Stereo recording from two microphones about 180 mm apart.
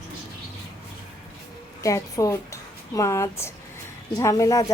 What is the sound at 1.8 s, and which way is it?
A woman's voice, 20° left (ahead or behind).